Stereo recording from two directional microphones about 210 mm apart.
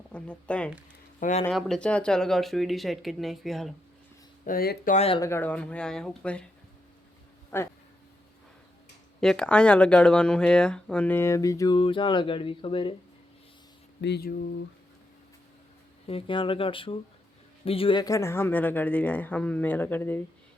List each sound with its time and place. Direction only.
0.1 s speech: 5° left (ahead or behind)
1.2 s speech: 35° left (ahead or behind)
1.5 s speech: centre (ahead or behind)
4.4 s speech: 45° left (ahead or behind)
4.9 s speech: 30° left (ahead or behind)
5.2 s speech: 10° left (ahead or behind)
7.5 s speech: 10° left (ahead or behind)
9.2 s speech: 5° left (ahead or behind); by 12.9 s 25° left (ahead or behind)
14.0 s speech: 50° left (ahead or behind)
16.0 s speech: 25° left (ahead or behind); by 20.2 s 10° left (ahead or behind)